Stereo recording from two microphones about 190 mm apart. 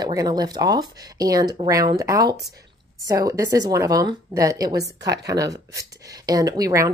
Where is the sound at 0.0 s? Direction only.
20° right (ahead or behind).